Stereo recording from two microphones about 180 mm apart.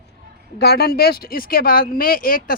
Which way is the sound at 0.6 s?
60° left (ahead or behind).